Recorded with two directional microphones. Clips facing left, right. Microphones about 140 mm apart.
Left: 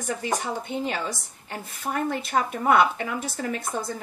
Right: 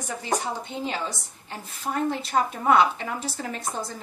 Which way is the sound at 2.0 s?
55° left (ahead or behind).